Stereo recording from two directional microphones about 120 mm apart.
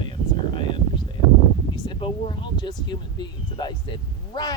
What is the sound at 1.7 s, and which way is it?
Speech, 40° left (ahead or behind).